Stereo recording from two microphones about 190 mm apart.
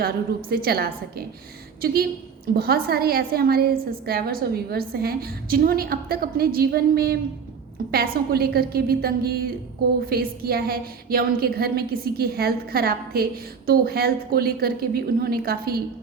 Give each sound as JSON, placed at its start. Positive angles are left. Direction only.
{"t": 0.5, "sound": "a woman's voice", "side_deg": -55}